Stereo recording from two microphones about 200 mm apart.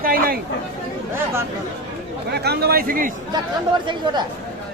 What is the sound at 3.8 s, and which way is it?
Speech, 20° right (ahead or behind).